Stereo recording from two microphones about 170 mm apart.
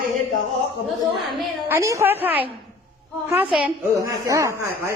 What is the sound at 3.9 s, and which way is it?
Speech, 20° right (ahead or behind).